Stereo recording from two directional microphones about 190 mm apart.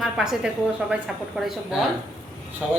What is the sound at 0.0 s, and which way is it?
A woman's voice, 5° right (ahead or behind).